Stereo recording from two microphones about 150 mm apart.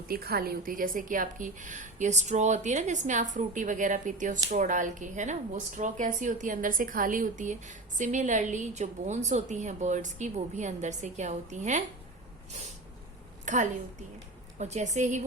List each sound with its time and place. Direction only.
0.1 s a woman's voice: 90° right; by 11.8 s 50° right (ahead or behind)
13.4 s a sound: 55° right (ahead or behind)
14.6 s a woman's voice: 50° right (ahead or behind)